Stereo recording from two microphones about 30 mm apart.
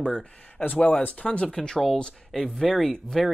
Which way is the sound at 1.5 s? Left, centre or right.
Left.